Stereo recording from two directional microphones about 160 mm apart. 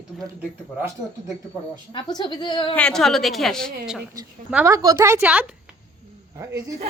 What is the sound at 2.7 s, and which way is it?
A woman's voice, 5° left (ahead or behind).